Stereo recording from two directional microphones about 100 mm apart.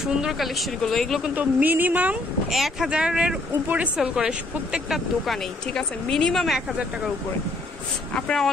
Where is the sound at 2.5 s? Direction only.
Centre (ahead or behind).